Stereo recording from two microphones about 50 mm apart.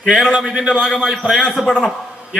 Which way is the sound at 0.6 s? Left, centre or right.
Centre.